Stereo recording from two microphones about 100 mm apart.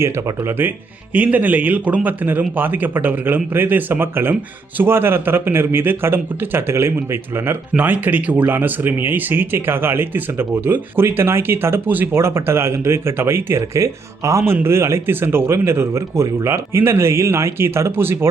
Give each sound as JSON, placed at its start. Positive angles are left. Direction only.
{"t": 0.0, "sound": "speech", "side_deg": -25}
{"t": 1.1, "sound": "speech", "side_deg": -15}